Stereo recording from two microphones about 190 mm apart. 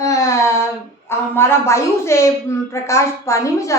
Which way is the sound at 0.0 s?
15° left (ahead or behind).